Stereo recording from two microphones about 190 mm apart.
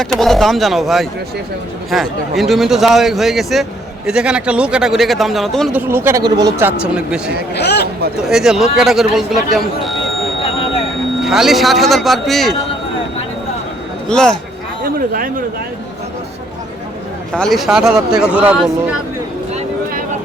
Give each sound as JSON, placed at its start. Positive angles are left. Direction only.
{"t": 0.0, "sound": "a man's voice", "side_deg": 0}
{"t": 5.9, "sound": "speech", "side_deg": -10}
{"t": 6.7, "sound": "a man's voice", "side_deg": -5}
{"t": 7.5, "sound": "speech", "side_deg": 60}
{"t": 8.2, "sound": "a man's voice", "side_deg": -5}
{"t": 11.2, "sound": "a man's voice", "side_deg": 0}
{"t": 14.1, "sound": "a man's voice", "side_deg": 5}
{"t": 14.9, "sound": "speech", "side_deg": -45}
{"t": 17.3, "sound": "a man's voice", "side_deg": 0}